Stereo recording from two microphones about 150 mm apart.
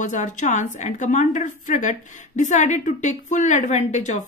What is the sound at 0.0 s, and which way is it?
A woman's voice, 55° left (ahead or behind).